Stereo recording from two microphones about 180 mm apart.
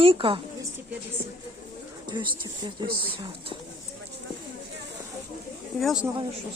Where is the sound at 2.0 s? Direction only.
25° right (ahead or behind).